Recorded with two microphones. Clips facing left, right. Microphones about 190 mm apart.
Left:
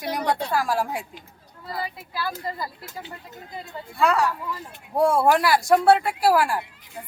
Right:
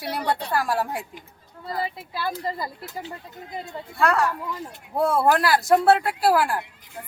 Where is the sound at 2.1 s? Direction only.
25° right (ahead or behind).